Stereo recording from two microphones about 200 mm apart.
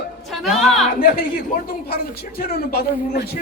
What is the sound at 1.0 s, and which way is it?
Speech, 45° left (ahead or behind).